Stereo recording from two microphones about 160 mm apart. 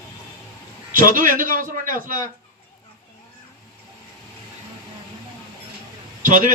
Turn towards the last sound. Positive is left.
turn(degrees=-55)  # may be behind; listen again after turning